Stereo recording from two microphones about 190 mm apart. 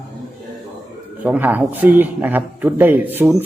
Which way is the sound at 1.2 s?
10° right (ahead or behind).